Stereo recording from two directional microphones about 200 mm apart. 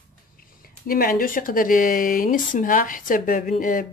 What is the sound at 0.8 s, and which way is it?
Speech, 45° left (ahead or behind).